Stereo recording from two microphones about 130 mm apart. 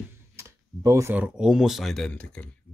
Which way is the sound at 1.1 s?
5° right (ahead or behind).